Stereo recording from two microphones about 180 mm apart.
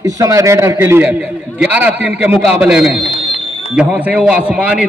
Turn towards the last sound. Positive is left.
turn(degrees=-5)  # may be behind; listen again after turning